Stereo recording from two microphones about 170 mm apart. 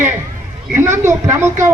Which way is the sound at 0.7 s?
15° right (ahead or behind).